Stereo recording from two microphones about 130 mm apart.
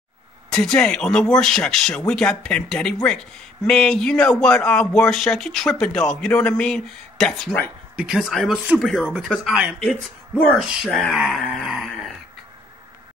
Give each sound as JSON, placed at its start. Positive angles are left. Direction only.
{"t": 0.5, "sound": "speech", "side_deg": 5}
{"t": 10.9, "sound": "speech", "side_deg": 5}